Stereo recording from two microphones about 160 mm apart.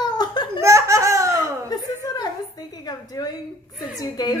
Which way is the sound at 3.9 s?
25° left (ahead or behind).